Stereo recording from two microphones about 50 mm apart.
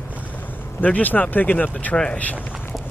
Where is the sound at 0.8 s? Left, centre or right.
Left.